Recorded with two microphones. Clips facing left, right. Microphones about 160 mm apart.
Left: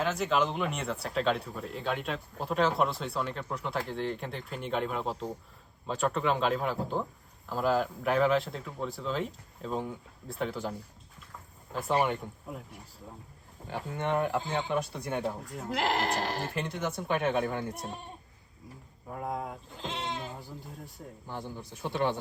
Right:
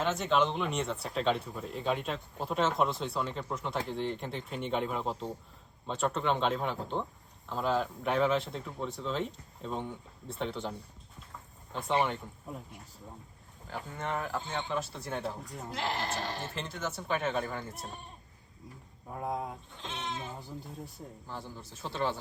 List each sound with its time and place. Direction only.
0.0 s speech: centre (ahead or behind)
13.7 s speech: 25° left (ahead or behind)
14.7 s speech: 15° left (ahead or behind)
15.2 s speech: centre (ahead or behind)
15.7 s speech: 90° left
16.6 s speech: 15° left (ahead or behind)
19.1 s speech: centre (ahead or behind)
21.2 s speech: 15° left (ahead or behind)